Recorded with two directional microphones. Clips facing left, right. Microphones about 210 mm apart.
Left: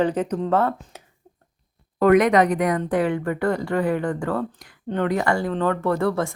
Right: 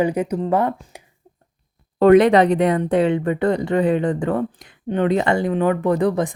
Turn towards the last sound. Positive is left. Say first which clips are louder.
# right 3 dB
turn(degrees=-15)  # may be behind; listen again after turning